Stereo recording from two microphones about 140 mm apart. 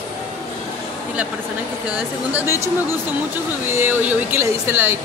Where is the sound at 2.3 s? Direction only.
20° right (ahead or behind).